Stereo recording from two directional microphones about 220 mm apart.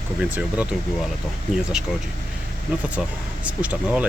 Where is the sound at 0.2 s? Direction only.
5° right (ahead or behind).